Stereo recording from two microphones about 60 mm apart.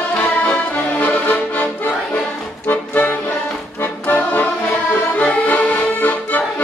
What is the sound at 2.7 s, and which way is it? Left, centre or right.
Music, left.